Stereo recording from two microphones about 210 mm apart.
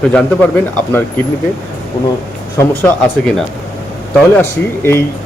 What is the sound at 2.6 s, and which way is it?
Speech, 5° left (ahead or behind).